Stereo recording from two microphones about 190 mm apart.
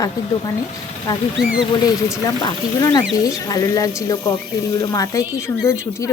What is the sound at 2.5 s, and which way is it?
A woman's voice, 20° left (ahead or behind).